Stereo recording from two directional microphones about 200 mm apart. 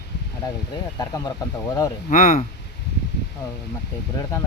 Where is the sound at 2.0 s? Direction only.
40° left (ahead or behind).